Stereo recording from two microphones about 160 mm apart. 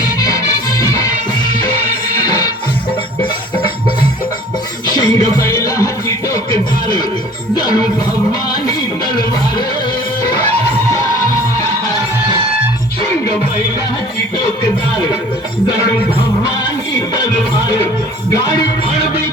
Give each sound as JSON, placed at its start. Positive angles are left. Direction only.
{"t": 0.2, "sound": "music", "side_deg": 20}
{"t": 2.2, "sound": "music", "side_deg": 25}
{"t": 4.9, "sound": "music", "side_deg": 25}